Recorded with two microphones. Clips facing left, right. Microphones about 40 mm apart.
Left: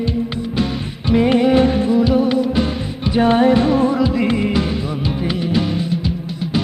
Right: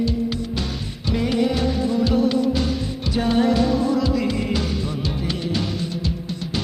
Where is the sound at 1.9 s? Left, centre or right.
Centre.